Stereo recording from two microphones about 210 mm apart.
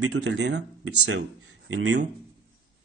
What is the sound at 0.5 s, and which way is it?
Speech, 55° right (ahead or behind).